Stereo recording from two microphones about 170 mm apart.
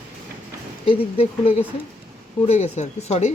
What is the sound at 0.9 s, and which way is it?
Speech, 35° left (ahead or behind).